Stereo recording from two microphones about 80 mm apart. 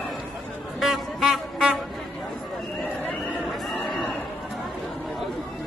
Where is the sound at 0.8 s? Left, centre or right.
Centre.